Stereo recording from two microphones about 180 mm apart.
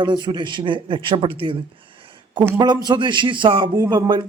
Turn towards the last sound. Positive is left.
turn(degrees=-25)  # may be behind; listen again after turning